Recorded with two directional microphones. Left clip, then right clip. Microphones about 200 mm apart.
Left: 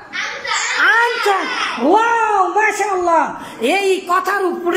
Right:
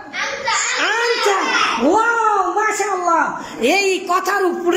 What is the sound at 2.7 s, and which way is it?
Speech, 15° left (ahead or behind).